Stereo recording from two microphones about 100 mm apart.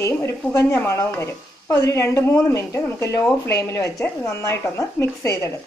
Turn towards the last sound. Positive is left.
turn(degrees=30)  # may be behind; listen again after turning